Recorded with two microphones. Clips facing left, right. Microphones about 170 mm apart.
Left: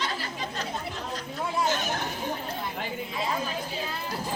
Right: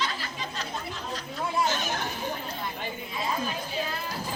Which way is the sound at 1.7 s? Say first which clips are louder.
Left 2 dB; 50° left (ahead or behind).